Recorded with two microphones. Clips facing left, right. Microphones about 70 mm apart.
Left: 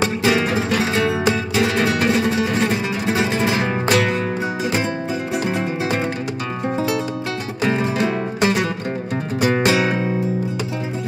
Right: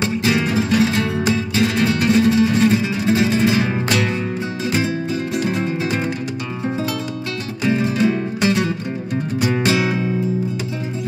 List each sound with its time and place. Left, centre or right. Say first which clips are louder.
0.2 s music: right 1 dB; left
5.4 s music: right 1 dB; left
7.6 s music: right 2 dB; left